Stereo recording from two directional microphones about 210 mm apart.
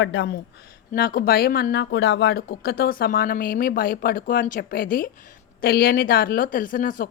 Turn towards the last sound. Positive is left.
turn(degrees=40)  # may be behind; listen again after turning